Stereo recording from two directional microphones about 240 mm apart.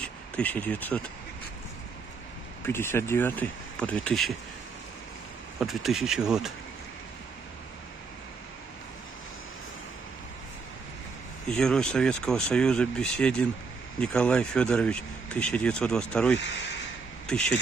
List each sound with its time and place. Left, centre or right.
0.0 s speech: centre
2.6 s speech: centre
5.6 s a man's voice: centre
11.5 s a man's voice: centre